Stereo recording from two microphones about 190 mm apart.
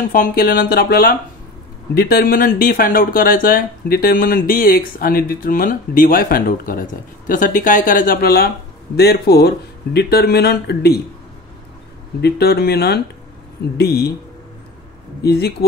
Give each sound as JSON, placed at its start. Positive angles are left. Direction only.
{"t": 0.1, "sound": "speech", "side_deg": 50}
{"t": 12.2, "sound": "speech", "side_deg": 60}
{"t": 15.2, "sound": "speech", "side_deg": 55}